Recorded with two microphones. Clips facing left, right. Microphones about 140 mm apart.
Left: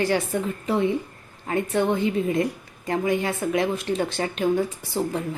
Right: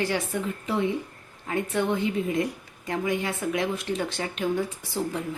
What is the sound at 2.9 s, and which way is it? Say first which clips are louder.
Speech: left 4 dB; 40° left (ahead or behind).